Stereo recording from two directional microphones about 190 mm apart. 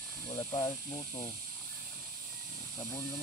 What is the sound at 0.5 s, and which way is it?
Speech, 20° left (ahead or behind).